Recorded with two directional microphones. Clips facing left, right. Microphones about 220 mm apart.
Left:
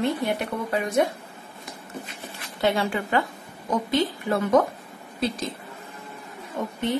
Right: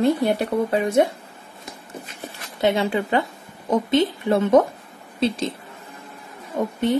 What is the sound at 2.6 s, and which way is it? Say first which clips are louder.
A woman's voice: right 4 dB; 20° right (ahead or behind).